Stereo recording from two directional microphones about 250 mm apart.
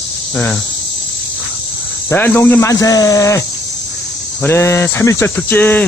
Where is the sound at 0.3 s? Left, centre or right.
Centre.